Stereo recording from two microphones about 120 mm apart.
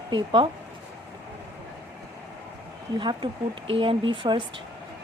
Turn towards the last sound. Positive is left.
turn(degrees=-40)  # may be behind; listen again after turning